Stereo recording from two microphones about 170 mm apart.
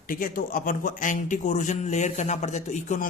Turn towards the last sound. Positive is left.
turn(degrees=45)  # may be behind; listen again after turning